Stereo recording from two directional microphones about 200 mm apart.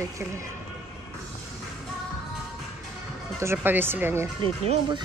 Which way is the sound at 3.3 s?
10° right (ahead or behind).